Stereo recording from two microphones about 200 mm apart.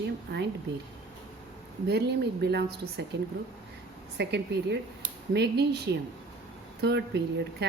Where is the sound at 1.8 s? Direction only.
55° right (ahead or behind).